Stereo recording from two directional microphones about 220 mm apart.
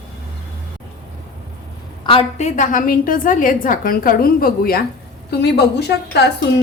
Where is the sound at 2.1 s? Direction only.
30° left (ahead or behind).